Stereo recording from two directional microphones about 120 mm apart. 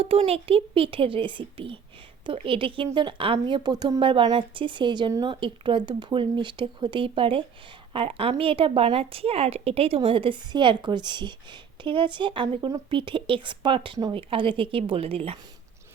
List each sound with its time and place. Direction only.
0.0 s speech: 55° right (ahead or behind)
3.3 s speech: 35° right (ahead or behind); by 15.4 s 50° right (ahead or behind)